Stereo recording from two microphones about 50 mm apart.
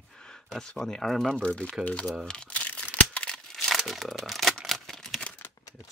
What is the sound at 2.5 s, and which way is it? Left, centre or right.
Crumpling, left.